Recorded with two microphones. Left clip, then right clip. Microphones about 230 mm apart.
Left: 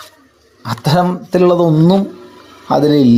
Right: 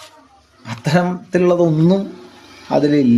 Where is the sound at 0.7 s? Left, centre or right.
Left.